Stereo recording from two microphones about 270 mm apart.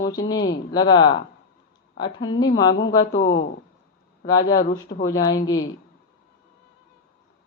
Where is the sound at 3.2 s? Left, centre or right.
Left.